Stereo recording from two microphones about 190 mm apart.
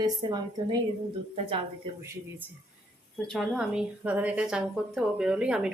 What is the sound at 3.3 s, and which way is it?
A woman's voice, centre (ahead or behind).